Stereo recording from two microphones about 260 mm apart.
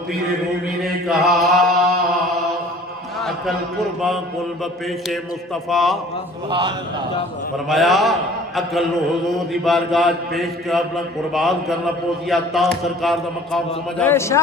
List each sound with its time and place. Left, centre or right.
0.8 s a man's voice: centre
5.6 s a man's voice: centre
6.5 s a man's voice: centre
7.7 s a man's voice: centre